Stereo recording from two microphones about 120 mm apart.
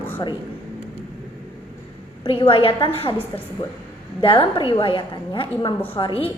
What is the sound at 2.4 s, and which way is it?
Speech, 50° left (ahead or behind).